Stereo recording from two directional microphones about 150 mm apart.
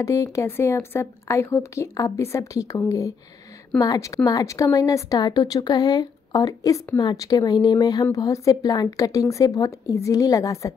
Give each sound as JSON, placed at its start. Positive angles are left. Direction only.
{"t": 0.0, "sound": "speech", "side_deg": 20}